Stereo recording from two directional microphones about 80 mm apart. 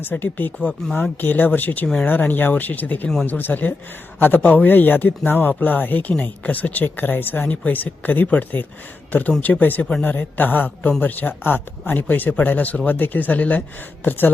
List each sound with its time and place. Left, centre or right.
0.0 s speech: left